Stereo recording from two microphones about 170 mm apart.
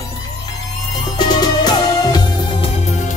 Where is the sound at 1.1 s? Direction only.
25° left (ahead or behind).